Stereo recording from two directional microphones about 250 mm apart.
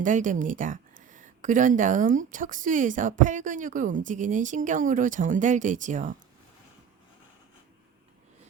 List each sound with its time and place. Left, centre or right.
0.0 s speech: right